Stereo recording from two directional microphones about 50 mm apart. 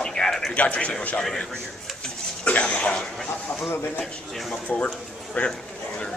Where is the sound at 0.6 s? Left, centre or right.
Left.